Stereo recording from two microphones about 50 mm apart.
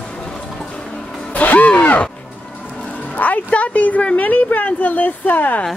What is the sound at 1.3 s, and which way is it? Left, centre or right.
Music, left.